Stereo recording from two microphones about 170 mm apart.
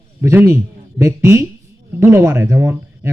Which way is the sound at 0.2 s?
15° right (ahead or behind).